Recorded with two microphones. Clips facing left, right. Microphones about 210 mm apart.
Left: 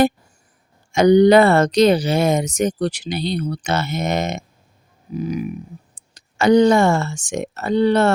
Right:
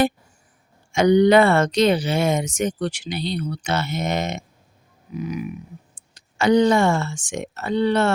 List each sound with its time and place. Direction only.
0.9 s speech: 40° left (ahead or behind)